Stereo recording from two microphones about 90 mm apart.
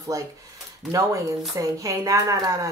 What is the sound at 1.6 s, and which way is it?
Speech, 40° right (ahead or behind).